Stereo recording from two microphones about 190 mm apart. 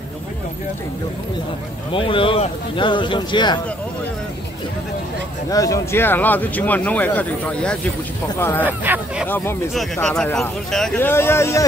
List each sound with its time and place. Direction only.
1.9 s speech: 25° left (ahead or behind)
5.5 s speech: 15° left (ahead or behind)
8.6 s speech: 10° right (ahead or behind)
9.3 s speech: 10° left (ahead or behind)